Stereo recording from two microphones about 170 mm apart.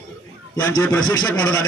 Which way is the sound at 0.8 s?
10° left (ahead or behind).